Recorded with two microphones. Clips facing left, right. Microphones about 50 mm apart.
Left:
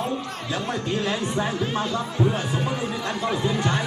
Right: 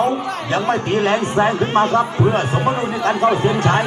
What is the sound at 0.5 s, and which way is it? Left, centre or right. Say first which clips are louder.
A man's voice: right 9 dB; right.